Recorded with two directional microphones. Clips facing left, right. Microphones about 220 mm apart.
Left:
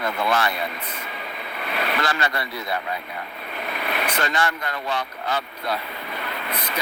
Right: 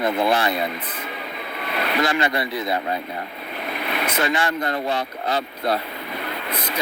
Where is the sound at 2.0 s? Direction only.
20° right (ahead or behind).